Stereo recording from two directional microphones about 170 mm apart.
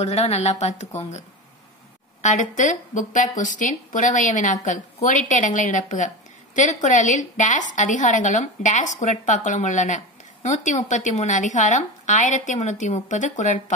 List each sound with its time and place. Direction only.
0.0 s a woman's voice: 40° left (ahead or behind)
2.2 s a woman's voice: 45° left (ahead or behind)